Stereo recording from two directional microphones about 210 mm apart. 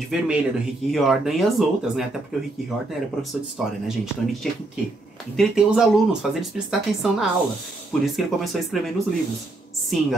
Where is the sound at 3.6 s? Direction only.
Centre (ahead or behind).